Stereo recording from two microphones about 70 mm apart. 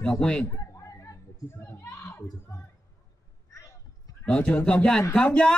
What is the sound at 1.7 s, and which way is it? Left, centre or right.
Speech, left.